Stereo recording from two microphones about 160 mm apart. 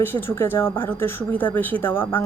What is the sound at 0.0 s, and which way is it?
Speech, 15° left (ahead or behind).